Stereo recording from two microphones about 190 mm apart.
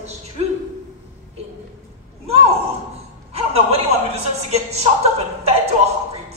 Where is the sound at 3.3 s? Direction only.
35° right (ahead or behind).